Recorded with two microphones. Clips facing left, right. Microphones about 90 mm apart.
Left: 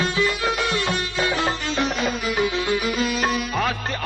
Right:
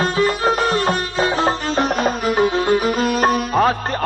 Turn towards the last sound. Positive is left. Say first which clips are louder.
# right 7 dB
turn(degrees=-40)  # may be behind; listen again after turning